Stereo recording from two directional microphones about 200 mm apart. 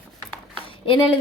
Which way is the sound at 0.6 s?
25° left (ahead or behind).